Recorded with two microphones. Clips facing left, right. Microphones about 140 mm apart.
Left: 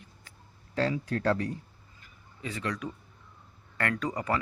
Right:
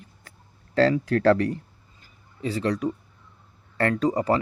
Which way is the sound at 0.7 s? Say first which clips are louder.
Right 9 dB; 80° right.